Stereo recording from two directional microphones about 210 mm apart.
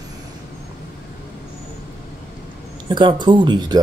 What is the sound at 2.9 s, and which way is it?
Speech, 20° right (ahead or behind).